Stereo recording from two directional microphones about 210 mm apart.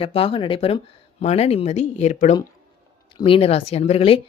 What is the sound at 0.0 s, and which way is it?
Speech, 25° left (ahead or behind).